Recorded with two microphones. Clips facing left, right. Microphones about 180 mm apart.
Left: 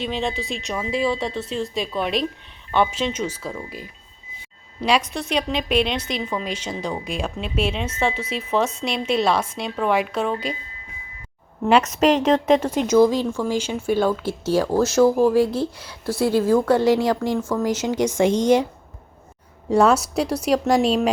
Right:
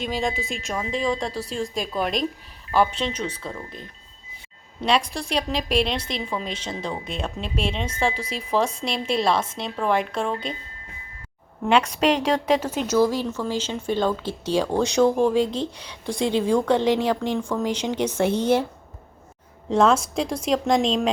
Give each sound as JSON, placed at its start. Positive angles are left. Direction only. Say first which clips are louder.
{"t": 0.0, "sound": "speech", "louder": "left 1 dB", "side_deg": 0}
{"t": 5.0, "sound": "a woman's voice", "louder": "left 2 dB", "side_deg": -30}
{"t": 6.1, "sound": "speech", "louder": "left 2 dB", "side_deg": 0}
{"t": 11.7, "sound": "speech", "louder": "left 3 dB", "side_deg": 5}
{"t": 12.5, "sound": "speech", "louder": "left 4 dB", "side_deg": -5}
{"t": 12.9, "sound": "speech", "louder": "left 4 dB", "side_deg": 15}
{"t": 19.7, "sound": "speech", "louder": "left 2 dB", "side_deg": 10}